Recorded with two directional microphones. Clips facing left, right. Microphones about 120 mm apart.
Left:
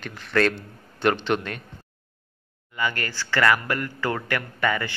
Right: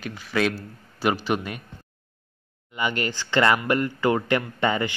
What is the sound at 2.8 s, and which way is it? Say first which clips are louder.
Speech: right 2 dB; 20° right (ahead or behind).